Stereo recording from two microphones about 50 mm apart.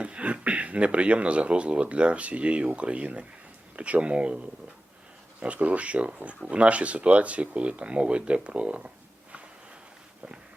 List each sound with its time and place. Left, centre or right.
0.0 s speech: right